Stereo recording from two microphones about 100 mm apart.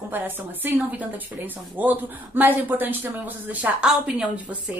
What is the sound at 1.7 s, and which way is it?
Speech, 20° right (ahead or behind).